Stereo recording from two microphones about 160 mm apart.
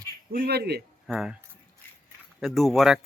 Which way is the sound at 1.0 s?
Centre (ahead or behind).